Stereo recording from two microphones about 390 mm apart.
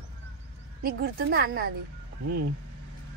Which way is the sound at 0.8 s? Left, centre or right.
Right.